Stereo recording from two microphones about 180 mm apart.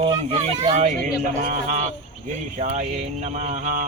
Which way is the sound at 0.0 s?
30° right (ahead or behind).